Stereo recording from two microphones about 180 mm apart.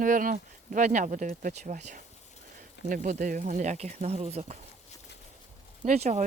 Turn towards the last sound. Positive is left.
turn(degrees=-35)  # may be behind; listen again after turning